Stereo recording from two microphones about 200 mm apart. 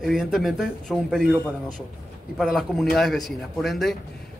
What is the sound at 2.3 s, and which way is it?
Speech, centre (ahead or behind).